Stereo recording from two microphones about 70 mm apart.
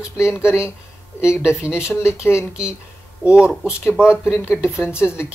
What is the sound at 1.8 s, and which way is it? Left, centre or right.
Speech, left.